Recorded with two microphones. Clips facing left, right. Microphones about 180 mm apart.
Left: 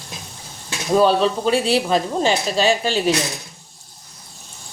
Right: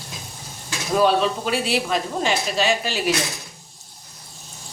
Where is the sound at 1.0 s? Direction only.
30° left (ahead or behind).